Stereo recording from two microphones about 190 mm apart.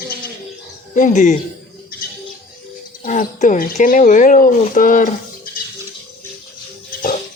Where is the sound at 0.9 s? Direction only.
40° left (ahead or behind).